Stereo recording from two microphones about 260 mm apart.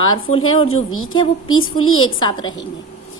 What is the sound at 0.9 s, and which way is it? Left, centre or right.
Speech, left.